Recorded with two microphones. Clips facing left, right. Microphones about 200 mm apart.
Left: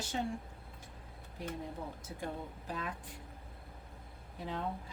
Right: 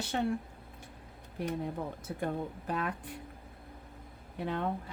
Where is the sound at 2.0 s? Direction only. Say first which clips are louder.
Right 9 dB; 60° right (ahead or behind).